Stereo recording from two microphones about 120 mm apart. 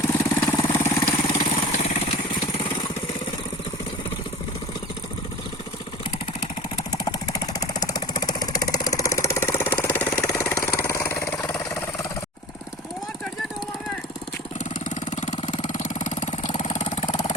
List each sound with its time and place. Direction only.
0.0 s vehicle: 25° left (ahead or behind)
0.9 s vehicle: 55° left (ahead or behind); by 2.0 s 80° left
2.5 s vehicle: 40° left (ahead or behind)
6.9 s jackhammer: 30° left (ahead or behind)
10.2 s vehicle: 25° left (ahead or behind)
14.6 s engine: 85° left
15.6 s engine: 90° left; by 17.2 s 65° left (ahead or behind)